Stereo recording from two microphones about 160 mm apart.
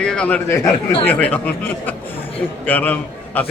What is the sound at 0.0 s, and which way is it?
A man's voice, 10° left (ahead or behind).